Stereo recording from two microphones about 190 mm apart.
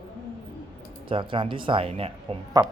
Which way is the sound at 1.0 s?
25° right (ahead or behind).